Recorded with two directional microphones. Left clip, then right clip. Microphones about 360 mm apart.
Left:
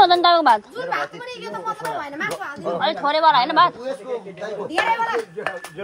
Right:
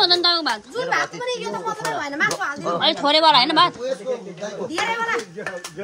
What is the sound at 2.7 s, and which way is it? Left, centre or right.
Speech, centre.